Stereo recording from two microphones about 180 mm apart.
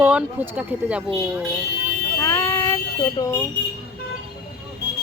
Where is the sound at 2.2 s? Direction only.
15° left (ahead or behind).